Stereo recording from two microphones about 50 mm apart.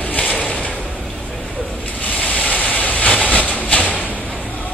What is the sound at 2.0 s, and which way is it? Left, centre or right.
Train, left.